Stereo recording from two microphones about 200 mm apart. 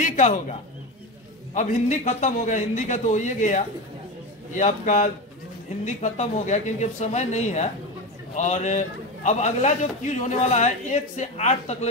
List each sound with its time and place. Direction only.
0.0 s a man's voice: 40° left (ahead or behind)